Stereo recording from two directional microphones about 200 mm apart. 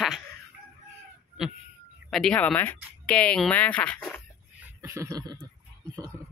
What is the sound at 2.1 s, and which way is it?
Speech, 5° left (ahead or behind).